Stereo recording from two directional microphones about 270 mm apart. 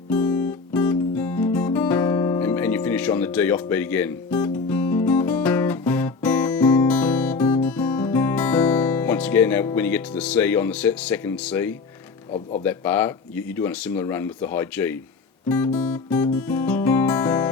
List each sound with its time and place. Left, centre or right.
0.1 s guitar: centre
12.6 s speech: centre
15.4 s guitar: centre